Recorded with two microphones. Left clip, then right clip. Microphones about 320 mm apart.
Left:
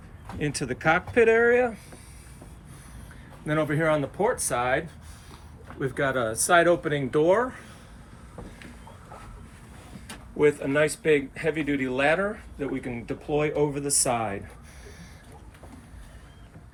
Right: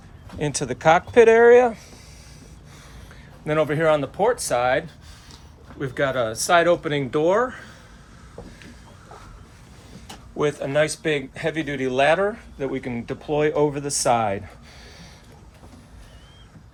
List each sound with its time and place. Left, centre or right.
0.4 s speech: right
1.4 s speech: right
3.4 s speech: right
5.8 s speech: right
10.3 s speech: centre